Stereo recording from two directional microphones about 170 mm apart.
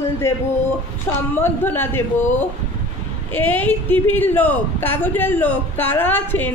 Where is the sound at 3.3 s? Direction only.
10° left (ahead or behind).